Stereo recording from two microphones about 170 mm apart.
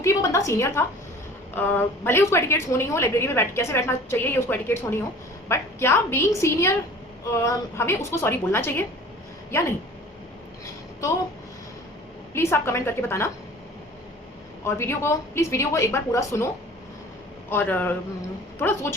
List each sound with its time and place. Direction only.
0.0 s a woman's voice: 20° left (ahead or behind)
12.3 s a woman's voice: 15° left (ahead or behind)
14.6 s a woman's voice: 15° left (ahead or behind)
17.5 s a woman's voice: 10° left (ahead or behind)